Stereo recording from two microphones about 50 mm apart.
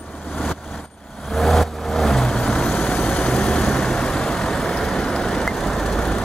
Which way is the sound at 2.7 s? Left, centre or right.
Left.